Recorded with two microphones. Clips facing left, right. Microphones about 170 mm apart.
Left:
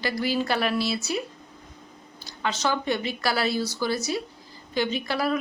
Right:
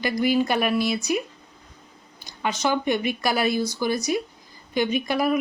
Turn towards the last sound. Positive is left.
turn(degrees=-15)  # may be behind; listen again after turning